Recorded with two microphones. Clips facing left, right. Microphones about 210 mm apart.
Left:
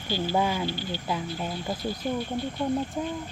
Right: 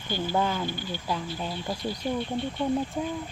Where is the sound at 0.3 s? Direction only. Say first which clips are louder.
Left 1 dB; 10° left (ahead or behind).